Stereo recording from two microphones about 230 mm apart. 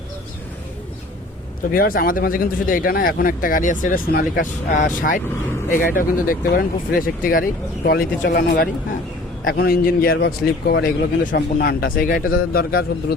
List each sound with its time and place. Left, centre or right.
1.7 s a man's voice: left